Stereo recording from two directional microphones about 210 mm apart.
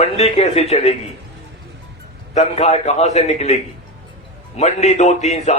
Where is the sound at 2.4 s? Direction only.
30° left (ahead or behind).